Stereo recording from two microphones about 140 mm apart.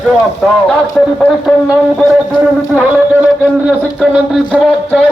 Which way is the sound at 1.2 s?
40° left (ahead or behind).